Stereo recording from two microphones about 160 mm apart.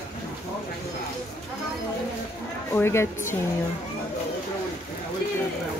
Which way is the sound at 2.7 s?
15° left (ahead or behind).